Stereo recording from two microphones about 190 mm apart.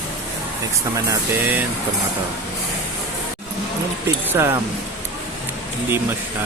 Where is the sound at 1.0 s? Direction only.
10° right (ahead or behind).